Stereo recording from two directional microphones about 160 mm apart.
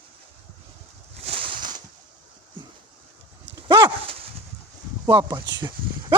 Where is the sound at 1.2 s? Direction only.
35° right (ahead or behind).